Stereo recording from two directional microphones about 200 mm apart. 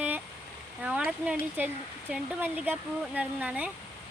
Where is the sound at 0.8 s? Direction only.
5° right (ahead or behind).